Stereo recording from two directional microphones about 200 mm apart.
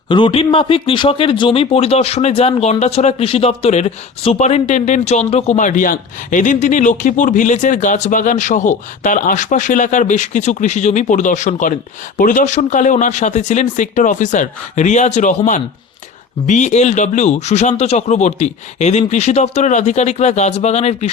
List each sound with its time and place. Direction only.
0.1 s speech: 25° left (ahead or behind)